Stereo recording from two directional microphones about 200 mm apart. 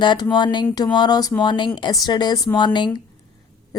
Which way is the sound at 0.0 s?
20° left (ahead or behind).